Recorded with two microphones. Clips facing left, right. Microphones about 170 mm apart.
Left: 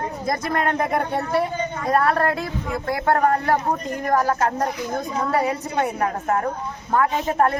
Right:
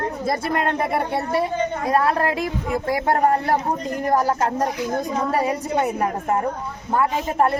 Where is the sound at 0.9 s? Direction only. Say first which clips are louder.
Even; 10° right (ahead or behind).